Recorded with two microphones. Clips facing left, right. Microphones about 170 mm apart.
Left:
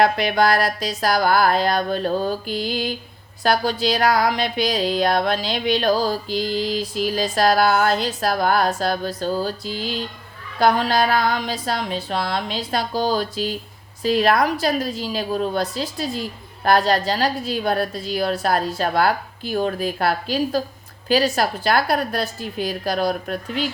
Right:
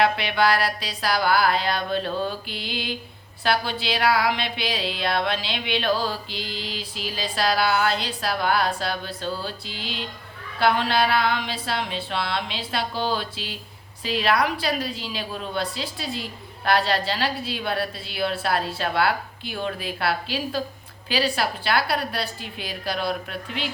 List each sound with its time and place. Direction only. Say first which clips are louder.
0.0 s a woman's voice: left 4 dB; 45° left (ahead or behind)